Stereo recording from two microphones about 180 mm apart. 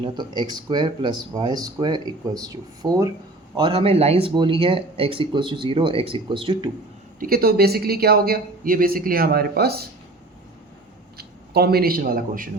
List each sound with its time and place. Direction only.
0.0 s speech: 25° right (ahead or behind)
7.2 s speech: 55° right (ahead or behind)
11.2 s a man's voice: 60° right (ahead or behind)